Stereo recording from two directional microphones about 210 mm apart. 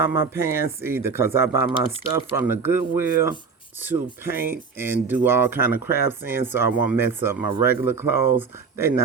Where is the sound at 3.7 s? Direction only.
10° right (ahead or behind).